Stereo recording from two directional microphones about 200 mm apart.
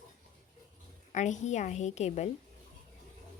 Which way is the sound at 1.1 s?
35° left (ahead or behind).